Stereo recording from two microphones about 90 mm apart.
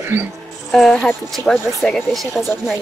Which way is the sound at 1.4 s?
40° right (ahead or behind).